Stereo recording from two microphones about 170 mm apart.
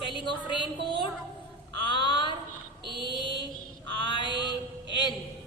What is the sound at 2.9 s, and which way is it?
Mantra, 25° left (ahead or behind).